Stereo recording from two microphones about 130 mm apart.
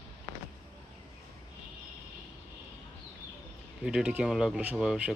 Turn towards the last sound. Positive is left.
turn(degrees=-10)  # may be behind; listen again after turning